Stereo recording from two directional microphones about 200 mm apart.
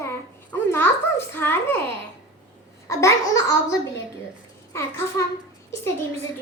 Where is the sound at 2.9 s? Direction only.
15° left (ahead or behind).